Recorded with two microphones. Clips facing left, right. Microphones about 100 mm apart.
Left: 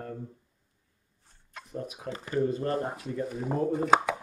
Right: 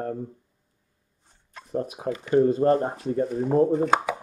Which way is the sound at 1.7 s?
40° right (ahead or behind).